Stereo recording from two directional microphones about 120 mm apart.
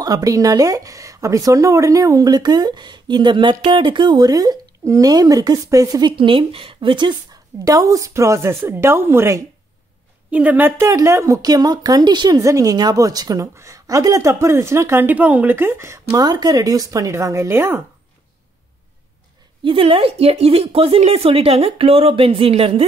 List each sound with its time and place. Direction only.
0.0 s speech: 30° right (ahead or behind)
7.6 s a woman's voice: 30° right (ahead or behind)
12.4 s a woman's voice: 25° right (ahead or behind)
19.6 s speech: 50° right (ahead or behind)